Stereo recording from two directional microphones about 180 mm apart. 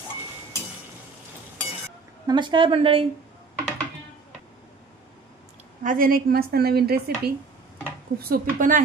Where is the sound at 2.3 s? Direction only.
25° right (ahead or behind).